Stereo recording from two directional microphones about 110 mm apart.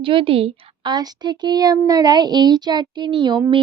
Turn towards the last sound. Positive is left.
turn(degrees=-45)  # may be behind; listen again after turning